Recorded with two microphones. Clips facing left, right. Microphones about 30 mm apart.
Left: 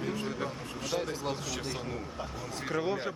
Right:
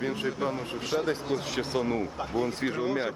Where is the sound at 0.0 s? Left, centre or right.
Right.